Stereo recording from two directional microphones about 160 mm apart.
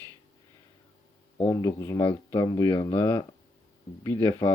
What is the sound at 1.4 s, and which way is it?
Speech, 20° left (ahead or behind).